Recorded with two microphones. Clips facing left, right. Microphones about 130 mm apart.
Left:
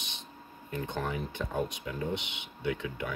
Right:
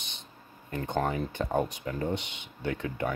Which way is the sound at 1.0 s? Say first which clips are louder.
Right 4 dB; 40° right (ahead or behind).